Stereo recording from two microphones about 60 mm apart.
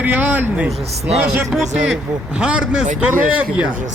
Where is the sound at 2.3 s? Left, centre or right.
Centre.